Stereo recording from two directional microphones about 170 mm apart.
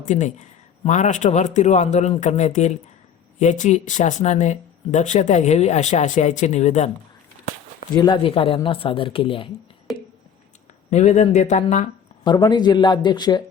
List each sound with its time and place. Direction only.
0.0 s speech: 45° left (ahead or behind)
7.9 s speech: 25° left (ahead or behind)
9.9 s a sound: centre (ahead or behind)
10.9 s speech: 40° left (ahead or behind)
12.2 s a man's voice: 25° left (ahead or behind)